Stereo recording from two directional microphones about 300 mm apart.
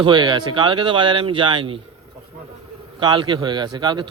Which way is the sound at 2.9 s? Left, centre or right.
Centre.